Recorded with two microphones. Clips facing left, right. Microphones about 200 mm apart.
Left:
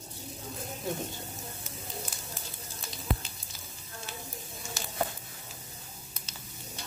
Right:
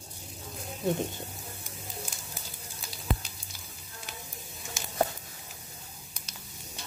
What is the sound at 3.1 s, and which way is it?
Fire, centre (ahead or behind).